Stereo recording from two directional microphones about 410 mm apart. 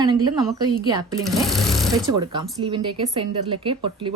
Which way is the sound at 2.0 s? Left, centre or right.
Centre.